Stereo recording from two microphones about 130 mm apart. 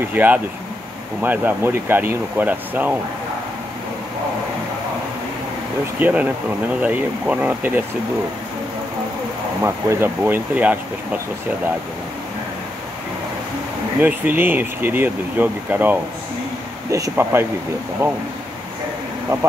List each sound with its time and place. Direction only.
0.1 s speech: 15° right (ahead or behind)
5.9 s speech: 15° right (ahead or behind)
9.6 s speech: 20° right (ahead or behind)
14.0 s speech: 15° right (ahead or behind)